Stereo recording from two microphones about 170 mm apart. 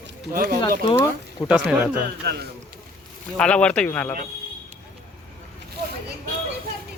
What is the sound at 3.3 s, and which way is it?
Speech, 5° left (ahead or behind).